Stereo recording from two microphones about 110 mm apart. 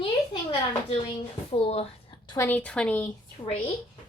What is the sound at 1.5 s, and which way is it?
Speech, 60° left (ahead or behind).